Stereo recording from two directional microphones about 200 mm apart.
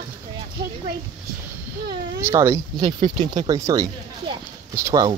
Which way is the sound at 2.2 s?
15° right (ahead or behind).